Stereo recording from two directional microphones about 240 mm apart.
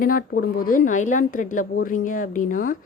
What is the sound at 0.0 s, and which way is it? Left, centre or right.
Speech, left.